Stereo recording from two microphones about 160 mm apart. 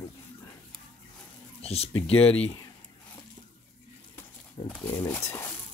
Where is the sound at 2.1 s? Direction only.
10° left (ahead or behind).